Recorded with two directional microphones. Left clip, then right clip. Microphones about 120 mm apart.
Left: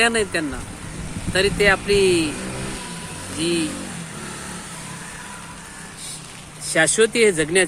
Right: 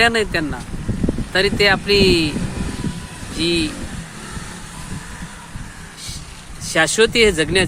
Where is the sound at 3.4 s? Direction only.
30° right (ahead or behind).